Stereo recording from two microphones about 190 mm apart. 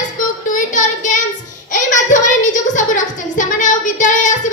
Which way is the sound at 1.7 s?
40° left (ahead or behind).